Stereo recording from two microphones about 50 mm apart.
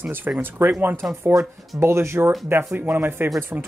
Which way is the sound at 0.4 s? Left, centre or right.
Right.